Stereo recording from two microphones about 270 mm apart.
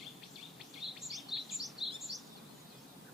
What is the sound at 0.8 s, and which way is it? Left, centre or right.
Bird vocalization, centre.